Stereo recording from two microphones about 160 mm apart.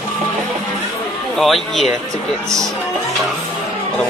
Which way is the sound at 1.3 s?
Centre (ahead or behind).